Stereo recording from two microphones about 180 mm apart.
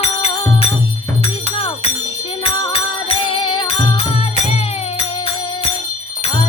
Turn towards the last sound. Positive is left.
turn(degrees=35)  # may be behind; listen again after turning